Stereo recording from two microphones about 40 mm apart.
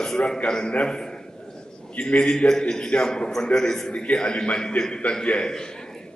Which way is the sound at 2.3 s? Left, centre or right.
Centre.